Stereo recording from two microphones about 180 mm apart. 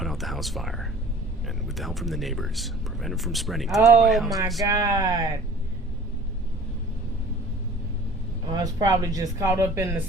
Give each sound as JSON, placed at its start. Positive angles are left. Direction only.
{"t": 0.0, "sound": "a sound", "side_deg": 0}
{"t": 1.6, "sound": "speech", "side_deg": 0}
{"t": 4.6, "sound": "speech", "side_deg": -20}
{"t": 8.4, "sound": "speech", "side_deg": -20}